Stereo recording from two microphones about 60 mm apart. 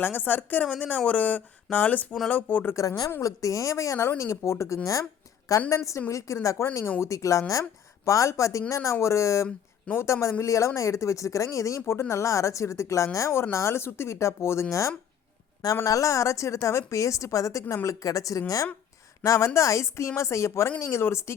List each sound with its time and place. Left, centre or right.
0.0 s a woman's voice: left
3.2 s speech: left
9.9 s a woman's voice: left
10.4 s a woman's voice: left
19.2 s a woman's voice: left